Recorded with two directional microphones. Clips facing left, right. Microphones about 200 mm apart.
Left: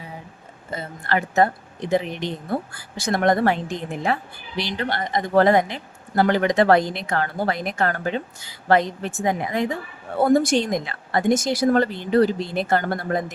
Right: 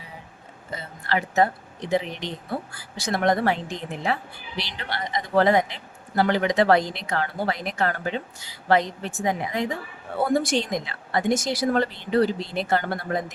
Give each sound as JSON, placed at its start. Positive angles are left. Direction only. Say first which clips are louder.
{"t": 0.7, "sound": "a woman's voice", "louder": "left 3 dB", "side_deg": 50}
{"t": 2.7, "sound": "a woman's voice", "louder": "left 3 dB", "side_deg": 50}